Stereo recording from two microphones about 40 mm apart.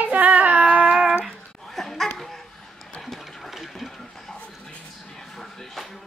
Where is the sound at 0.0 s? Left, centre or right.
Right.